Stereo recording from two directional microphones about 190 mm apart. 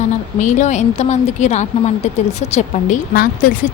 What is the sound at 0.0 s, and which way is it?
A woman's voice, 40° left (ahead or behind).